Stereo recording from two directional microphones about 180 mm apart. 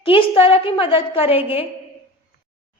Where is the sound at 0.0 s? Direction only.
30° left (ahead or behind).